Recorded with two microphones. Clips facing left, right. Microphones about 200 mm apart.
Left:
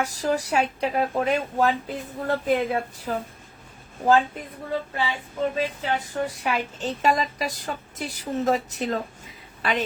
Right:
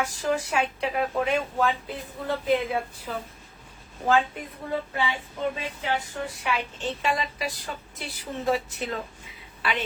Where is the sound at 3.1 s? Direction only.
50° left (ahead or behind).